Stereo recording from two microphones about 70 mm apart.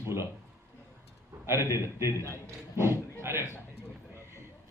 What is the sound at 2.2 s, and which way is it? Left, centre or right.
A man's voice, right.